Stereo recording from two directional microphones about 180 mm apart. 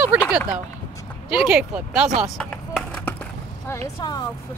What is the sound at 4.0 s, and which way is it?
Speech, 25° left (ahead or behind).